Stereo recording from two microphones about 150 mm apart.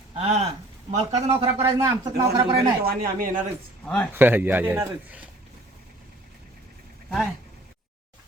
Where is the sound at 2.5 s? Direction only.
80° right.